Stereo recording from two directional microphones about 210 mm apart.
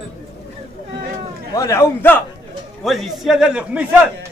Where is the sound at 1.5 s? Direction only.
15° left (ahead or behind).